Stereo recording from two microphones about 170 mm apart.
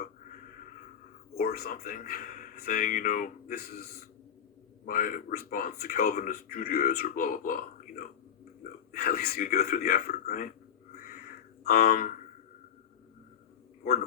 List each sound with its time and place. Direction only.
1.4 s speech: 65° left (ahead or behind)
4.9 s speech: 55° left (ahead or behind)
8.9 s speech: 60° left (ahead or behind)
10.2 s a man's voice: 50° left (ahead or behind)
10.9 s a sound: 60° left (ahead or behind)